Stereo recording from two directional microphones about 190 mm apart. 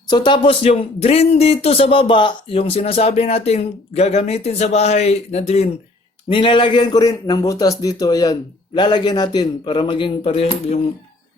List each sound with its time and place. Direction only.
0.1 s a man's voice: 25° left (ahead or behind)